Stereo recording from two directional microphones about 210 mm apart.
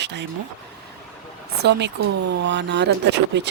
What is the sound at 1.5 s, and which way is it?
Speech, 55° right (ahead or behind).